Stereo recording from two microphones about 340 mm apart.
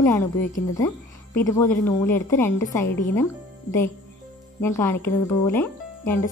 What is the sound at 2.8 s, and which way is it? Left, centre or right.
Speech, left.